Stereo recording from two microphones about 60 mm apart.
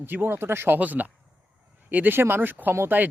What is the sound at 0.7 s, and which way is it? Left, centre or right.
A man's voice, right.